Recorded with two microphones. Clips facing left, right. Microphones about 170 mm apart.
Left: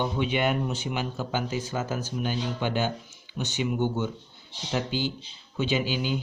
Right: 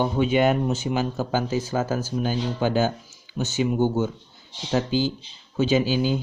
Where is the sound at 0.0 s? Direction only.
45° right (ahead or behind).